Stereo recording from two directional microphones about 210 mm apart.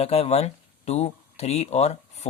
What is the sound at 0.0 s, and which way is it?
Speech, 30° left (ahead or behind).